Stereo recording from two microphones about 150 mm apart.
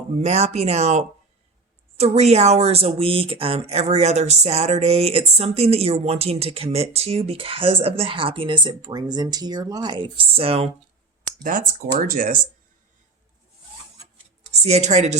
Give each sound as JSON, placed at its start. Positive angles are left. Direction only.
{"t": 0.2, "sound": "speech", "side_deg": -45}
{"t": 11.3, "sound": "speech", "side_deg": -65}
{"t": 14.5, "sound": "speech", "side_deg": -45}